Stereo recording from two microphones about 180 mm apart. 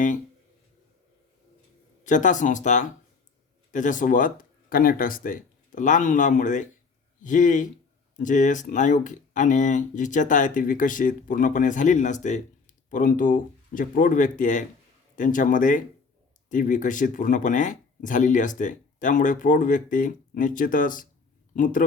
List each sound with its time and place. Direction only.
2.0 s speech: 45° left (ahead or behind)